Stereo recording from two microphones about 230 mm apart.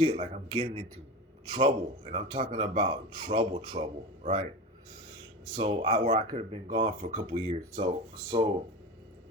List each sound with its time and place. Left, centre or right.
0.0 s a man's voice: right
5.5 s a man's voice: right